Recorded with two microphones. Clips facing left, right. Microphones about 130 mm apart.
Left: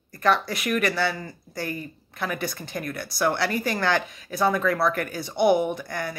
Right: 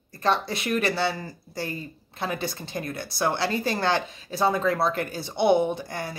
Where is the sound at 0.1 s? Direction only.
25° right (ahead or behind).